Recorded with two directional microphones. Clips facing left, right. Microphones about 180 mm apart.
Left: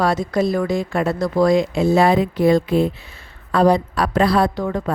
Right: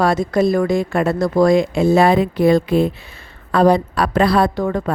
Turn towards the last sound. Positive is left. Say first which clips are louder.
# right 2 dB
turn(degrees=-50)  # may be behind; listen again after turning